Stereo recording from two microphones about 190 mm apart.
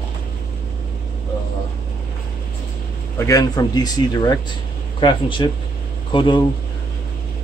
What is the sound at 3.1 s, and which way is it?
Speech, 15° left (ahead or behind).